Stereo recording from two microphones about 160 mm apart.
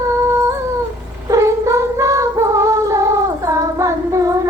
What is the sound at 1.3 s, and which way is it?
Cat, 20° right (ahead or behind).